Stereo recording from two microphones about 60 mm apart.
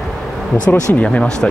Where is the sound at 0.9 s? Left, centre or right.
Left.